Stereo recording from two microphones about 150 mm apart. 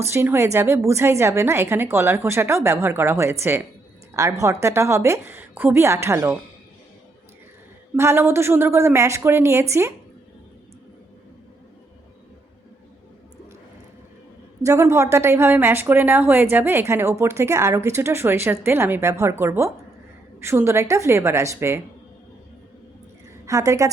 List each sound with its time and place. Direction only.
0.0 s a woman's voice: 15° right (ahead or behind)
7.9 s a woman's voice: 15° right (ahead or behind)
14.6 s a woman's voice: 20° right (ahead or behind)
23.5 s a woman's voice: 20° right (ahead or behind)